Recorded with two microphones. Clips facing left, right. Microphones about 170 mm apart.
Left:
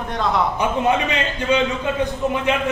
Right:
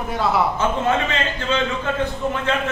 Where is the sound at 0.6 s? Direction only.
15° left (ahead or behind).